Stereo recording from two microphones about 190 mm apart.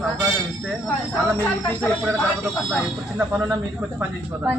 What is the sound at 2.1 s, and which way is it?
A woman's voice, 10° right (ahead or behind).